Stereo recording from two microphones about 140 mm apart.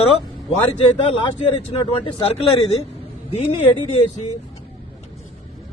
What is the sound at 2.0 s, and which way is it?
A man's voice, 45° left (ahead or behind).